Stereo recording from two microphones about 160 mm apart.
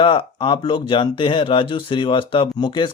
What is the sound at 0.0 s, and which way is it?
Speech, 30° left (ahead or behind).